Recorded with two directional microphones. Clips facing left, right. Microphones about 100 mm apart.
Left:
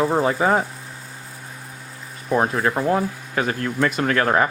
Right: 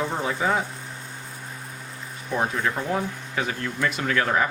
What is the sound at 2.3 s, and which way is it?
Speech, 45° left (ahead or behind).